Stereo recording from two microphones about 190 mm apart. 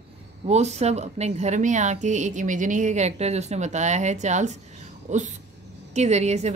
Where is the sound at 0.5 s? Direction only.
35° right (ahead or behind).